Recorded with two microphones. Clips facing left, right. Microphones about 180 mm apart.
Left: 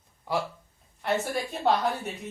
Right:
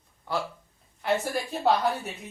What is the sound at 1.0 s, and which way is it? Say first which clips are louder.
A woman's voice: right 1 dB; centre (ahead or behind).